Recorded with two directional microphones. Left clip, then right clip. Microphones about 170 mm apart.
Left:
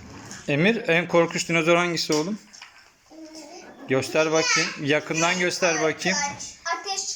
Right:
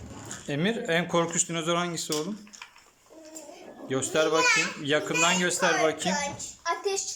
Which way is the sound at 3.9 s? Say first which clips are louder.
Left 3 dB; centre (ahead or behind).